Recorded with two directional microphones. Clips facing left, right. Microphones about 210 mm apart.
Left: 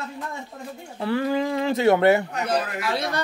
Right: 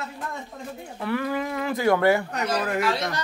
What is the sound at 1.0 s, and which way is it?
Speech, 30° left (ahead or behind).